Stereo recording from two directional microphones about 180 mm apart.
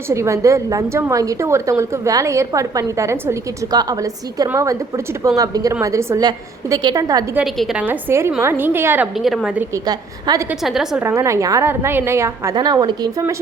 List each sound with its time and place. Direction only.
0.1 s a woman's voice: 15° right (ahead or behind)
7.3 s a woman's voice: centre (ahead or behind)
9.1 s a woman's voice: centre (ahead or behind)
9.7 s a woman's voice: 20° right (ahead or behind)
10.6 s a woman's voice: centre (ahead or behind)
11.0 s a woman's voice: 15° right (ahead or behind)